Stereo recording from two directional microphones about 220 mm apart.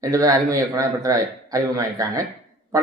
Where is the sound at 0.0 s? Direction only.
15° right (ahead or behind).